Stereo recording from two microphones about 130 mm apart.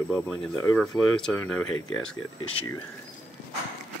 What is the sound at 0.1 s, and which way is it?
Speech, 5° left (ahead or behind).